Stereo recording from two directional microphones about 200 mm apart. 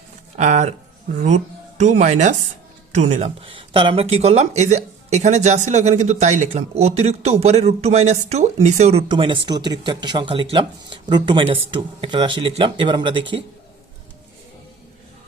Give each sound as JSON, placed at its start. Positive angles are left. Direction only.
{"t": 0.3, "sound": "speech", "side_deg": -35}
{"t": 1.8, "sound": "speech", "side_deg": -35}